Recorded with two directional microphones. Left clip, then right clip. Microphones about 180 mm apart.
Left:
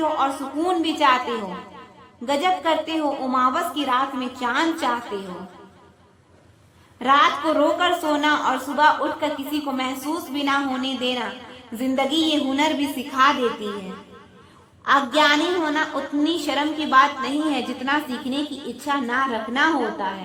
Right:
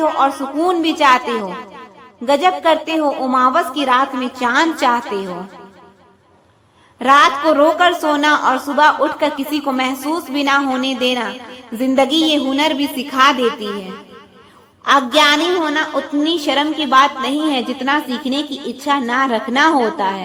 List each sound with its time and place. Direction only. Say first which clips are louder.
0.0 s a woman's voice: right 7 dB; 30° right (ahead or behind)
7.0 s a woman's voice: right 6 dB; 30° right (ahead or behind)